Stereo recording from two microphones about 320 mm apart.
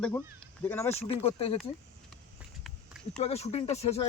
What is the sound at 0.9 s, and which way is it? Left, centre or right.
Speech, centre.